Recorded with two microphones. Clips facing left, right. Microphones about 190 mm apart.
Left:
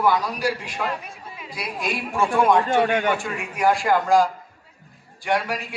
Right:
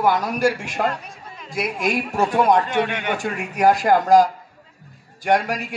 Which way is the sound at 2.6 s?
45° left (ahead or behind).